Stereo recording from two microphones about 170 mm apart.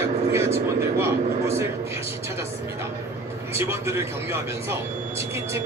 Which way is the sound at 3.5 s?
15° right (ahead or behind).